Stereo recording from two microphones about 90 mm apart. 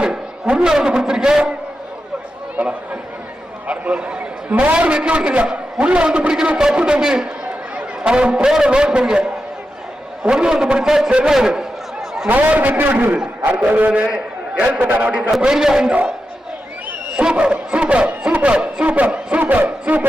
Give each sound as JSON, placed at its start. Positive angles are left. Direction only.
{"t": 0.0, "sound": "a man's voice", "side_deg": -10}
{"t": 2.6, "sound": "a man's voice", "side_deg": -15}
{"t": 12.3, "sound": "a man's voice", "side_deg": -20}
{"t": 17.2, "sound": "a man's voice", "side_deg": -10}